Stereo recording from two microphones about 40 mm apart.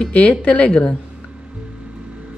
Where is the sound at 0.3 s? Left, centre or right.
Left.